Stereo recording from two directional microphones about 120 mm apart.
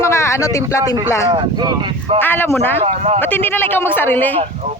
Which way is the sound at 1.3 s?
35° right (ahead or behind).